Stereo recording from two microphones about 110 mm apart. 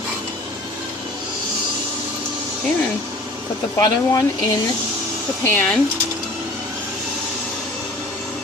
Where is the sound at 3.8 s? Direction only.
35° left (ahead or behind).